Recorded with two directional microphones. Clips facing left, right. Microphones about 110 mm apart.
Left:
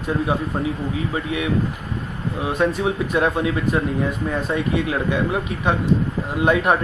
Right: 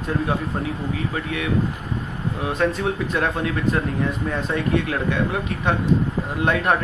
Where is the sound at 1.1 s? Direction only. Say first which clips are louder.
Left 2 dB; 15° left (ahead or behind).